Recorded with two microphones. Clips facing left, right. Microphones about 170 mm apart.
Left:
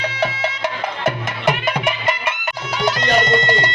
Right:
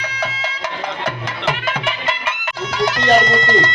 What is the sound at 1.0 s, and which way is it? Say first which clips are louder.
Music: left 5 dB; 20° left (ahead or behind).